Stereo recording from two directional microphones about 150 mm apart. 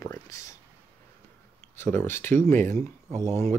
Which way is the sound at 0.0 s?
20° left (ahead or behind).